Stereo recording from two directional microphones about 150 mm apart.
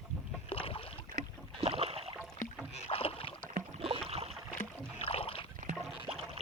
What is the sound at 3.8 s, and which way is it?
Rowboat, 40° right (ahead or behind).